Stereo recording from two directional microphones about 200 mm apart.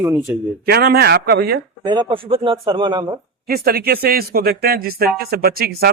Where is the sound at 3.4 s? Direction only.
50° right (ahead or behind).